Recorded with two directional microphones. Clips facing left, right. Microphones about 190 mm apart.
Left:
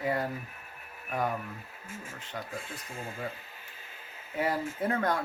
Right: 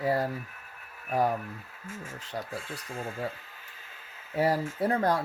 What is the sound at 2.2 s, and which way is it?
Speech, 35° right (ahead or behind).